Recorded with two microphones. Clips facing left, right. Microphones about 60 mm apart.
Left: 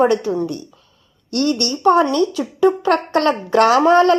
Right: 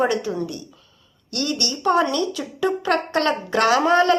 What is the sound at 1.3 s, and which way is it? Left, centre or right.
A woman's voice, left.